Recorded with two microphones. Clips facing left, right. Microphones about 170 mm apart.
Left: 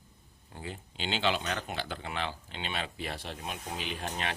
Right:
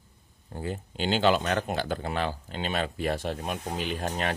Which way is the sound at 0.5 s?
45° right (ahead or behind).